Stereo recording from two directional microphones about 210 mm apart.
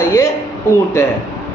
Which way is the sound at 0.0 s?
10° left (ahead or behind).